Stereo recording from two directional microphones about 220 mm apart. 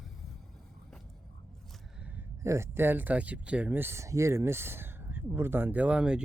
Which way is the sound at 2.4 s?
10° right (ahead or behind).